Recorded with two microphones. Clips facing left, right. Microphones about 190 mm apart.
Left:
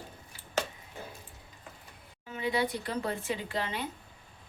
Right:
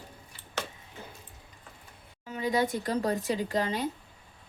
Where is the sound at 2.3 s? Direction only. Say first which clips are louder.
Right 3 dB; 40° right (ahead or behind).